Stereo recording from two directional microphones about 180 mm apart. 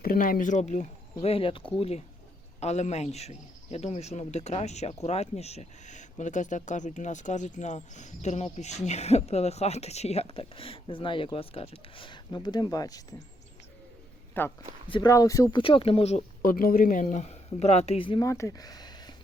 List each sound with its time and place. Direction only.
0.0 s speech: 55° left (ahead or behind); by 13.2 s 20° left (ahead or behind)
14.4 s speech: 10° left (ahead or behind)
14.8 s speech: 30° left (ahead or behind)
15.1 s speech: 20° left (ahead or behind)
15.6 s speech: 30° left (ahead or behind)
16.4 s speech: 50° left (ahead or behind); by 18.3 s 30° left (ahead or behind)
18.3 s speech: 15° left (ahead or behind)